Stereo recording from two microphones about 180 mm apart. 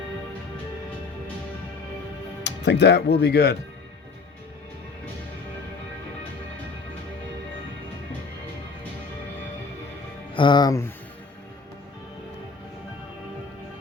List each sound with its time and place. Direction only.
2.4 s speech: 75° left (ahead or behind)
10.3 s speech: 25° left (ahead or behind)